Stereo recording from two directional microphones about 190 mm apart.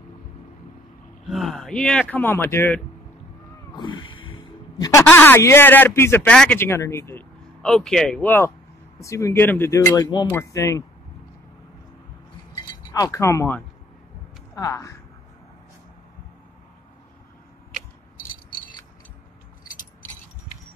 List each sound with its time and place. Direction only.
1.3 s speech: centre (ahead or behind)
3.7 s a sound: 25° left (ahead or behind)
5.0 s speech: 10° left (ahead or behind)
7.6 s speech: centre (ahead or behind)
12.5 s chink: 20° left (ahead or behind)
14.5 s speech: 15° left (ahead or behind)